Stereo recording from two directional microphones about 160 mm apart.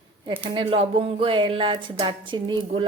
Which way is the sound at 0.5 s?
35° right (ahead or behind).